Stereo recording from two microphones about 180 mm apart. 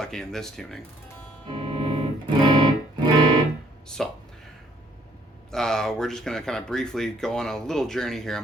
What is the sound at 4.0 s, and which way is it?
Speech, centre (ahead or behind).